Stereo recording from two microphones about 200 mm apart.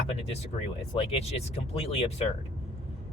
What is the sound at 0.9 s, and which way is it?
Speech, 30° left (ahead or behind).